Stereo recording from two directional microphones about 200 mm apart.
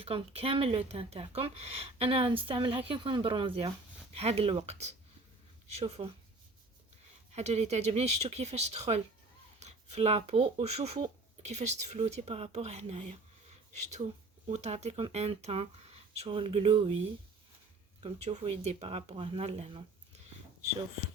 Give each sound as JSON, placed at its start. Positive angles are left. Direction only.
{"t": 0.0, "sound": "speech", "side_deg": -30}
{"t": 7.3, "sound": "speech", "side_deg": -35}
{"t": 14.4, "sound": "speech", "side_deg": -35}
{"t": 18.0, "sound": "speech", "side_deg": -30}